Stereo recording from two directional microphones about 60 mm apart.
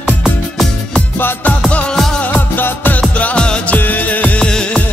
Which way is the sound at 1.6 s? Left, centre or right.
Left.